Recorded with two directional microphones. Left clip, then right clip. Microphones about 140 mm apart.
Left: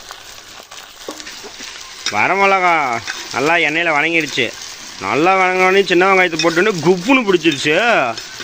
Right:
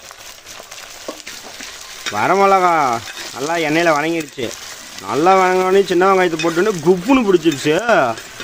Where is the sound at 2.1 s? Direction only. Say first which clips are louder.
Even; centre (ahead or behind).